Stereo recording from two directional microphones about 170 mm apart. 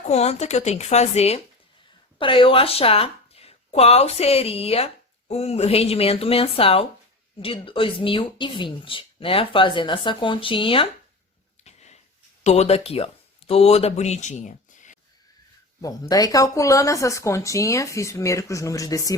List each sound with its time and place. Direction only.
0.1 s speech: 40° left (ahead or behind)
11.6 s a sound: 40° left (ahead or behind)
12.4 s speech: 40° left (ahead or behind)
15.8 s speech: 20° left (ahead or behind)